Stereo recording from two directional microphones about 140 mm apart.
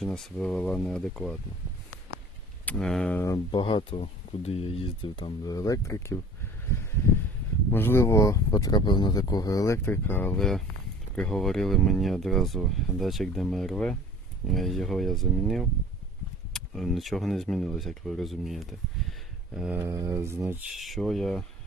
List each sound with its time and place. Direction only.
0.0 s speech: centre (ahead or behind)
2.6 s speech: 5° left (ahead or behind)
3.5 s speech: 35° left (ahead or behind); by 6.1 s 20° left (ahead or behind)
7.7 s speech: 15° left (ahead or behind); by 19.8 s 5° right (ahead or behind)
19.8 s mantra: 25° right (ahead or behind)
20.7 s speech: centre (ahead or behind)